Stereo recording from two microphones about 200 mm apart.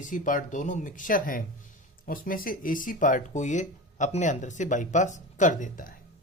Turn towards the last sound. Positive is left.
turn(degrees=45)  # may be behind; listen again after turning